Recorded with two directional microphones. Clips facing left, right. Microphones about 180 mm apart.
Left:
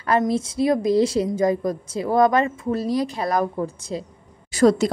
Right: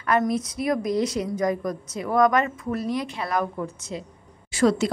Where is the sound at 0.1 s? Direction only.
30° left (ahead or behind).